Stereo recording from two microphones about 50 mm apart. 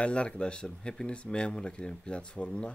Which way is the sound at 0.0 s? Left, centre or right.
Left.